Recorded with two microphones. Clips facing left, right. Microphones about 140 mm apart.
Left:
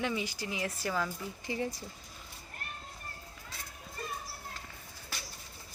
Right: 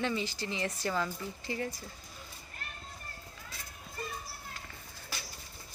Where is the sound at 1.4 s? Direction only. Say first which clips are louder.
Left 2 dB; 20° left (ahead or behind).